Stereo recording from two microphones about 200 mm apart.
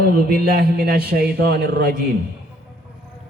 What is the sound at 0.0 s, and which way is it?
Speech, 50° right (ahead or behind).